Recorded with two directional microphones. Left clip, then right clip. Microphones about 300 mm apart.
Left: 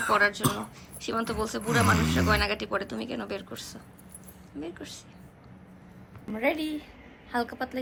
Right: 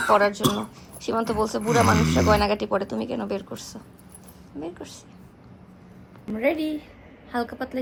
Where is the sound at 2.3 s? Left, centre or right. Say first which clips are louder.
Right 7 dB; centre.